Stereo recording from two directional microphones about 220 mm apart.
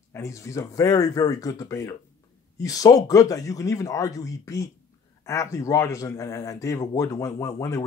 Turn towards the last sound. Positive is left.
turn(degrees=15)  # may be behind; listen again after turning